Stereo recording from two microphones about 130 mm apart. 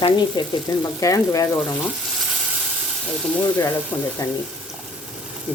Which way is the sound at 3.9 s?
30° left (ahead or behind).